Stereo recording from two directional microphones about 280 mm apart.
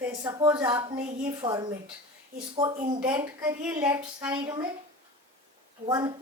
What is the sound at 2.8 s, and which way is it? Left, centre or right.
A woman's voice, centre.